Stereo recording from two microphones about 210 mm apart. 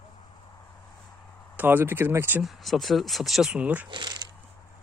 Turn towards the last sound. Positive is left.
turn(degrees=-20)  # may be behind; listen again after turning